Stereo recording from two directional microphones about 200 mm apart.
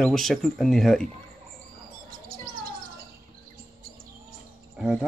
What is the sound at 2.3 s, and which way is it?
Bird, 45° right (ahead or behind).